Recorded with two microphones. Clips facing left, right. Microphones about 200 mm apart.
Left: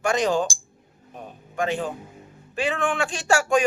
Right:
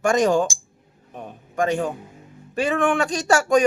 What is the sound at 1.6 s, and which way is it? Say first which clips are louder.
A man's voice: right 4 dB; 45° right (ahead or behind).